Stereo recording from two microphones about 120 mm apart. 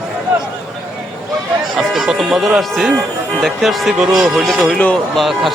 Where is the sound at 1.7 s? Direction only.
5° right (ahead or behind).